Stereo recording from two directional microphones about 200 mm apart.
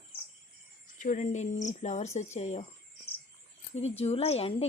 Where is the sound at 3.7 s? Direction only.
30° left (ahead or behind).